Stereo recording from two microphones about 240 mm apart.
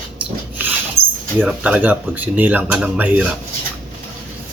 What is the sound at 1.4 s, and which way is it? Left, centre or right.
Speech, centre.